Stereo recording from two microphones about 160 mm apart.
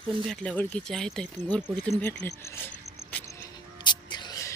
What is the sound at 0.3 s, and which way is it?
Speech, 10° left (ahead or behind).